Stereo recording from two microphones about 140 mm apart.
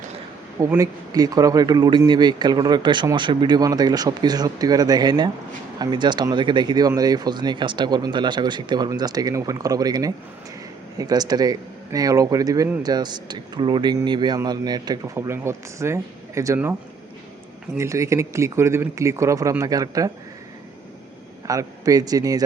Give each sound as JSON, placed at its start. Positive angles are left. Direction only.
{"t": 0.8, "sound": "a man's voice", "side_deg": -25}
{"t": 17.7, "sound": "a man's voice", "side_deg": -20}
{"t": 21.4, "sound": "a man's voice", "side_deg": -25}